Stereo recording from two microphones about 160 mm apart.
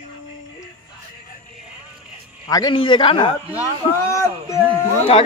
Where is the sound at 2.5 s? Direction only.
30° left (ahead or behind).